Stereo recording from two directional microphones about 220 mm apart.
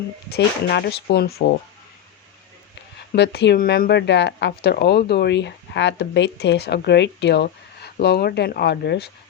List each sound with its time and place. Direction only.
0.3 s speech: 50° left (ahead or behind)
3.1 s speech: 50° left (ahead or behind)